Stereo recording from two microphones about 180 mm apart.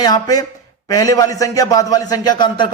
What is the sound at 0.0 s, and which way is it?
A man's voice, 20° left (ahead or behind).